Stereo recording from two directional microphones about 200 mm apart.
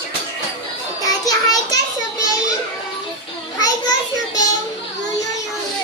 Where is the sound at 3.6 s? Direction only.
20° left (ahead or behind).